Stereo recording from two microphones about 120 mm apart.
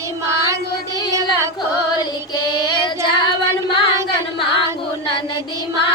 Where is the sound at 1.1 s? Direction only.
20° right (ahead or behind).